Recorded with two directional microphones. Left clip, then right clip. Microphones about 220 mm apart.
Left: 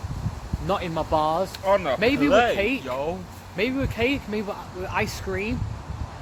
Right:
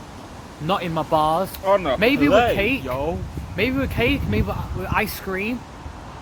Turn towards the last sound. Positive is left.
turn(degrees=-15)  # may be behind; listen again after turning